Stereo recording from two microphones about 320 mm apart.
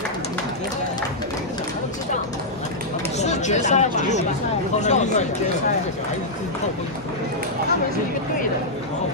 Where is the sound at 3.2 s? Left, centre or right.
Left.